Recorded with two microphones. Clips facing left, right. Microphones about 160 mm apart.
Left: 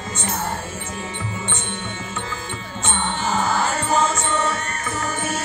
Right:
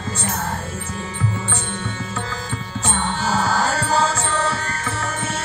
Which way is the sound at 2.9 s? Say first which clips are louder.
Right 1 dB; 40° right (ahead or behind).